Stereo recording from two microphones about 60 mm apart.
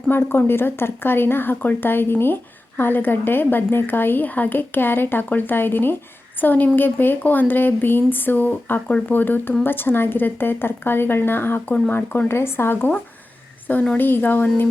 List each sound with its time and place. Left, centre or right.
0.1 s a woman's voice: left
13.7 s speech: left